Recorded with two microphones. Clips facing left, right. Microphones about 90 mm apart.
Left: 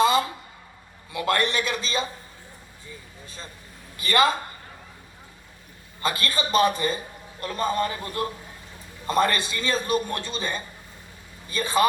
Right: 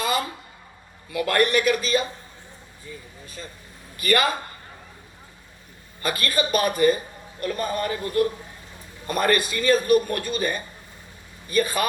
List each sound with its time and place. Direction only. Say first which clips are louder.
0.0 s a sound: left 5 dB; 25° left (ahead or behind)
1.1 s a man's voice: right 3 dB; 25° left (ahead or behind)
3.9 s a man's voice: even; 25° left (ahead or behind)
6.0 s a man's voice: right 2 dB; 25° left (ahead or behind)